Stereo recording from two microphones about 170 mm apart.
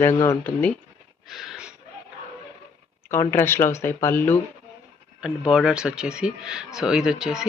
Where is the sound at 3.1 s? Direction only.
15° left (ahead or behind).